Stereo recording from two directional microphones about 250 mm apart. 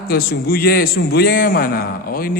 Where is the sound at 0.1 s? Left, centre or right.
Left.